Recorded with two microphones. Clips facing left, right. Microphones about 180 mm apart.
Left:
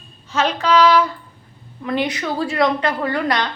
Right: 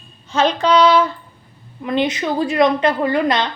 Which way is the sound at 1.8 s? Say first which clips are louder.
Right 3 dB; 20° right (ahead or behind).